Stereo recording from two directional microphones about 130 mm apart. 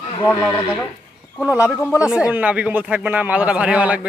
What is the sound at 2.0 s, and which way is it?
A man's voice, 5° right (ahead or behind).